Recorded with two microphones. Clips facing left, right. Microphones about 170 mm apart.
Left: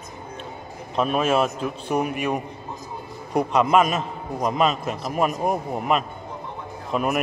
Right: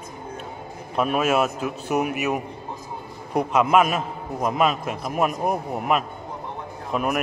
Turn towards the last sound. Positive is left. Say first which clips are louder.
# left 1 dB
turn(degrees=-5)  # may be behind; listen again after turning